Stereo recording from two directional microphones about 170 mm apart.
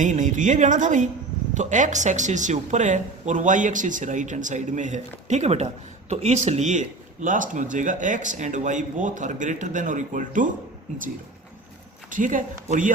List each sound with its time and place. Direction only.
0.0 s speech: 45° right (ahead or behind)
12.1 s speech: 50° right (ahead or behind)